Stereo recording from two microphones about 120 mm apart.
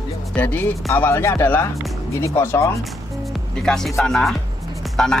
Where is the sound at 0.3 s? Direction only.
15° left (ahead or behind).